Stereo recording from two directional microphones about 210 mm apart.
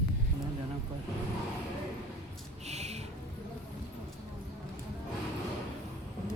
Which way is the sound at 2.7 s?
30° right (ahead or behind).